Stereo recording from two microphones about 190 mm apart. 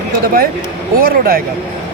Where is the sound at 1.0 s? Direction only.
50° right (ahead or behind).